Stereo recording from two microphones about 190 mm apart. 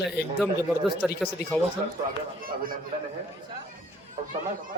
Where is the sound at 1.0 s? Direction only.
Centre (ahead or behind).